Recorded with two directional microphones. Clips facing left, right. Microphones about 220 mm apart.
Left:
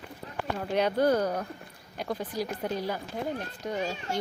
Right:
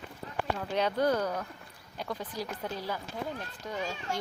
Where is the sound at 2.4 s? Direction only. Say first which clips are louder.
Left 6 dB; 10° left (ahead or behind).